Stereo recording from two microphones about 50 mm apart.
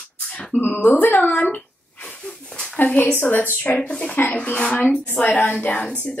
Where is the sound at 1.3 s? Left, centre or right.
Left.